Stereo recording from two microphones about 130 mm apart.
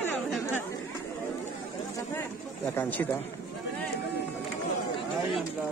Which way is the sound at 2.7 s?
15° left (ahead or behind).